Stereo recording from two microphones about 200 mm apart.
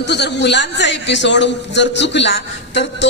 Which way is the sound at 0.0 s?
60° left (ahead or behind).